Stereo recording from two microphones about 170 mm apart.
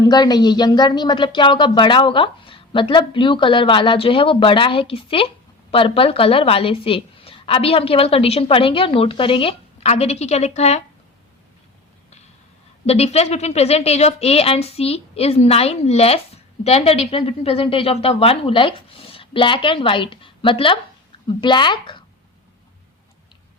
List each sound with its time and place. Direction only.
0.0 s a woman's voice: 25° left (ahead or behind); by 10.8 s 40° left (ahead or behind)
12.8 s a woman's voice: 35° left (ahead or behind)